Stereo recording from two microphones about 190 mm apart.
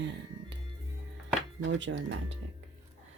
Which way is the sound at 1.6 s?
75° right (ahead or behind).